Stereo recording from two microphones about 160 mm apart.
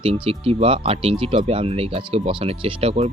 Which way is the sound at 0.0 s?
40° right (ahead or behind).